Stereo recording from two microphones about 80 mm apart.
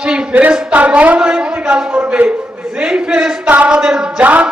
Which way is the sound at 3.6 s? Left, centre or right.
Centre.